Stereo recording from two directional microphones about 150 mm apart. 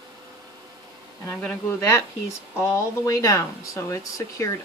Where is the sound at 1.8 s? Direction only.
20° left (ahead or behind).